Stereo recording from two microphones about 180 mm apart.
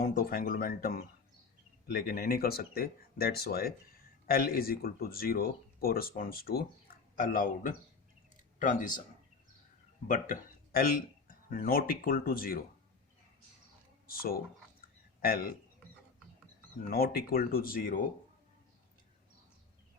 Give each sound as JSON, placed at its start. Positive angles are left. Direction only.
{"t": 0.0, "sound": "speech", "side_deg": 50}
{"t": 10.1, "sound": "speech", "side_deg": 50}
{"t": 14.1, "sound": "speech", "side_deg": 55}
{"t": 16.9, "sound": "speech", "side_deg": 55}